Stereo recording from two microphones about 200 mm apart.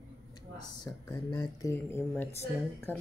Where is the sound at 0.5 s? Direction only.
20° left (ahead or behind).